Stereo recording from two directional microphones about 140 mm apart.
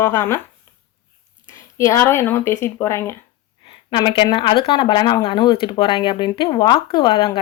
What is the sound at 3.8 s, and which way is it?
Speech, 35° left (ahead or behind).